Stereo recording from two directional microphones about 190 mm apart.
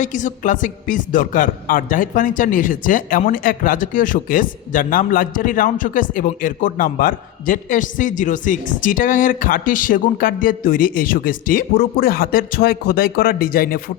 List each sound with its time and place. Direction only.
0.0 s speech: 40° left (ahead or behind)